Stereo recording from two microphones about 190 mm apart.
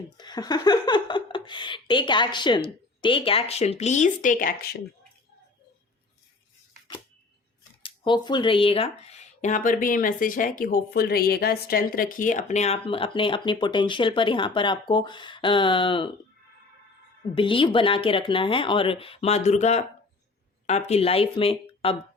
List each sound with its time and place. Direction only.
0.2 s speech: 20° left (ahead or behind); by 4.8 s 50° left (ahead or behind)
7.8 s speech: 25° left (ahead or behind)
17.3 s speech: 25° left (ahead or behind)